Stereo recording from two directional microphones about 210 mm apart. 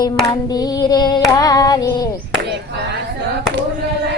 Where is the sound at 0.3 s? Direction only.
20° left (ahead or behind).